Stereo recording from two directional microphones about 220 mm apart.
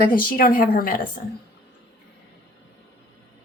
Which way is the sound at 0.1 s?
40° left (ahead or behind).